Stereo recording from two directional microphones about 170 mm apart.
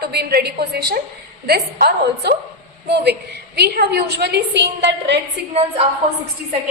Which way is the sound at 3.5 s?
70° right (ahead or behind).